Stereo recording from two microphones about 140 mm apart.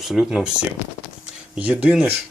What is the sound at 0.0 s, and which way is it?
Speech, 5° right (ahead or behind).